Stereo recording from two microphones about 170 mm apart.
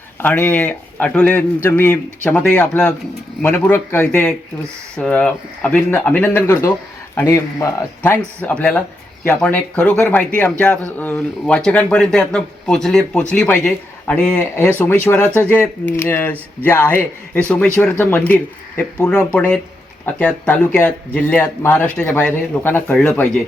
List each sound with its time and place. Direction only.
0.2 s speech: 10° left (ahead or behind)